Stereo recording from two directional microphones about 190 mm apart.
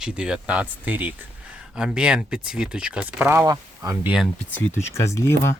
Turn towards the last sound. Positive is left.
turn(degrees=15)  # may be behind; listen again after turning